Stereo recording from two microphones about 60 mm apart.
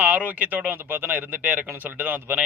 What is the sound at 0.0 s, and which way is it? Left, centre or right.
A man's voice, right.